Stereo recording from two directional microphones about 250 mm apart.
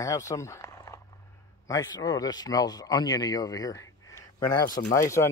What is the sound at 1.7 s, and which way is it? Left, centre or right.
Speech, centre.